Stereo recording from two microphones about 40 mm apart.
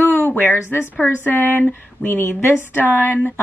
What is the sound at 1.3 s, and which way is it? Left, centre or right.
Speech, left.